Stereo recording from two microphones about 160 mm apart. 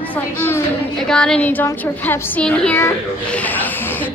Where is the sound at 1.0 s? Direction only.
5° left (ahead or behind).